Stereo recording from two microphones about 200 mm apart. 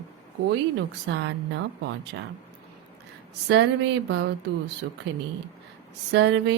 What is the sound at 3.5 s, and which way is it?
Speech, 60° right (ahead or behind).